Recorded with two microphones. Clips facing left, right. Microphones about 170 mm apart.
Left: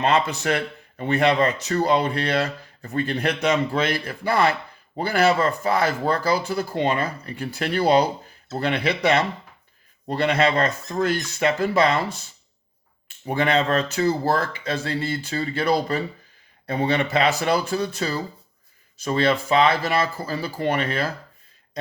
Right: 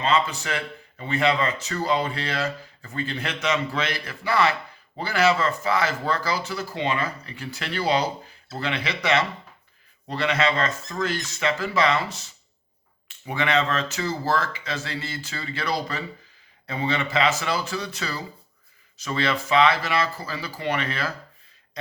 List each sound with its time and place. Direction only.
0.0 s a man's voice: 65° left (ahead or behind)
10.1 s speech: 50° left (ahead or behind)
13.1 s speech: 45° left (ahead or behind)
15.3 s speech: 45° left (ahead or behind)